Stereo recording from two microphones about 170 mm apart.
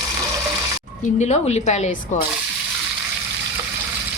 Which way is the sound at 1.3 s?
40° left (ahead or behind).